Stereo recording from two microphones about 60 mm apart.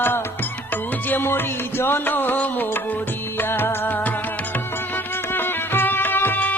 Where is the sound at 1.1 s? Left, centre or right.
Left.